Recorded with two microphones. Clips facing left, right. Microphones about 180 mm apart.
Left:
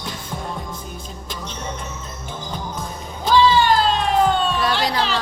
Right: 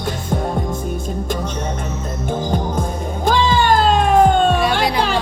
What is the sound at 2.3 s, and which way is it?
Music, 50° right (ahead or behind).